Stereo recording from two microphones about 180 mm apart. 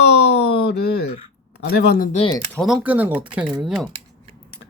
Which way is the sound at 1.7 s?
60° left (ahead or behind).